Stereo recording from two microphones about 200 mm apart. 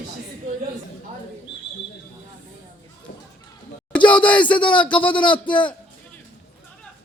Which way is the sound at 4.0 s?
25° left (ahead or behind).